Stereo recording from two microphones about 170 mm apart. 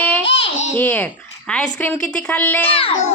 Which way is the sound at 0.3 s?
35° left (ahead or behind).